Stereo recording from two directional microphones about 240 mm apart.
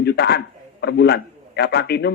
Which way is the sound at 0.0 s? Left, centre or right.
Left.